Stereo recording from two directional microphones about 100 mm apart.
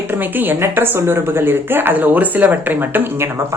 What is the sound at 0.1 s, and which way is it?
A woman's voice, 20° right (ahead or behind).